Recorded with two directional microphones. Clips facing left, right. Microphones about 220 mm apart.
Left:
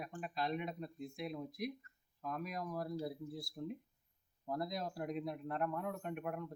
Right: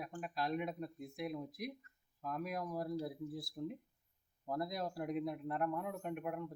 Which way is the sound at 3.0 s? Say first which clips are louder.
Even; 5° right (ahead or behind).